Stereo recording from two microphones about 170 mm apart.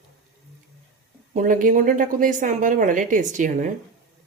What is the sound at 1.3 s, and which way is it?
A woman's voice, 50° right (ahead or behind).